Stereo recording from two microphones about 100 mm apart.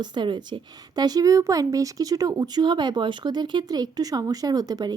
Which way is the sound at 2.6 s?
50° right (ahead or behind).